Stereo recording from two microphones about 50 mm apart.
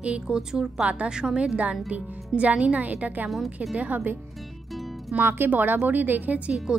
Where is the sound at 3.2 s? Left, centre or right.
Centre.